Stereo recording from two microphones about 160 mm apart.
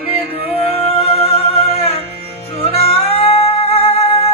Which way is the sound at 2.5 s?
40° left (ahead or behind).